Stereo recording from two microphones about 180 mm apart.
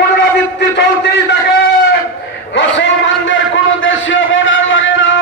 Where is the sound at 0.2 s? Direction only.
75° left (ahead or behind).